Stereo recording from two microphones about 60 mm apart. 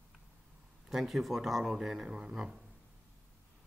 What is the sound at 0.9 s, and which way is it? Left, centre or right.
Speech, centre.